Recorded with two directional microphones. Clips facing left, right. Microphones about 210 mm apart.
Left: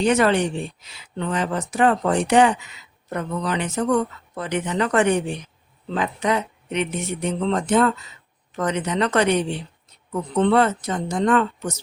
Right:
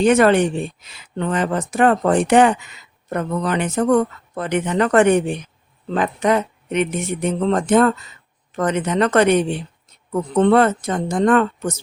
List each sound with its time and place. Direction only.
0.0 s speech: 50° right (ahead or behind)